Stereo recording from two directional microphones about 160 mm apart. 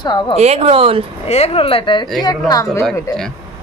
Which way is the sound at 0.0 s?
30° left (ahead or behind).